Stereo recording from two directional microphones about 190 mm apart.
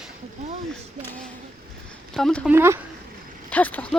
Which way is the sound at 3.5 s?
10° left (ahead or behind).